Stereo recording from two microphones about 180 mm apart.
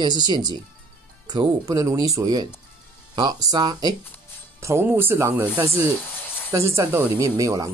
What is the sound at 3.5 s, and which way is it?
Speech, 20° right (ahead or behind).